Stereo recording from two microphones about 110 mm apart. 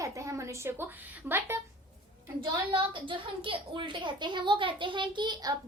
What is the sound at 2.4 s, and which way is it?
A woman's voice, 50° right (ahead or behind).